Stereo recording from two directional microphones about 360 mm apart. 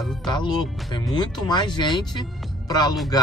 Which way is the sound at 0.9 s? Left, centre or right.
Centre.